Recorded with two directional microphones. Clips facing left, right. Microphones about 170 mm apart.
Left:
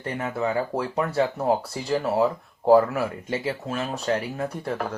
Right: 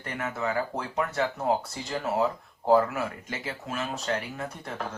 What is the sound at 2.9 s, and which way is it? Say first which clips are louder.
Speech: left 6 dB; 30° left (ahead or behind).